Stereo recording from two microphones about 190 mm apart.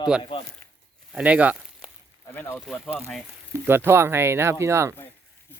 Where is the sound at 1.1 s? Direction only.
5° right (ahead or behind).